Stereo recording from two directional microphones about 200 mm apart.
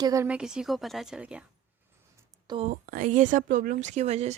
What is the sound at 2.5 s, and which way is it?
Speech, 30° right (ahead or behind).